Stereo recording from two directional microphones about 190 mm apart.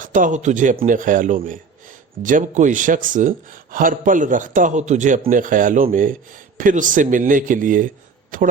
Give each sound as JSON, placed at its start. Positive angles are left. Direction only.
{"t": 0.0, "sound": "speech", "side_deg": -45}